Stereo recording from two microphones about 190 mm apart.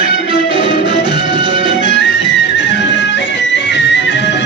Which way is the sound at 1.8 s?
70° left (ahead or behind).